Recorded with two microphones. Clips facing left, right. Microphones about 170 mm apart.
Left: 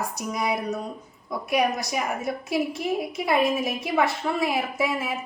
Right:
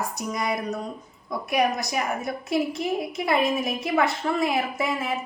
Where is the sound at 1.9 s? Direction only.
5° left (ahead or behind).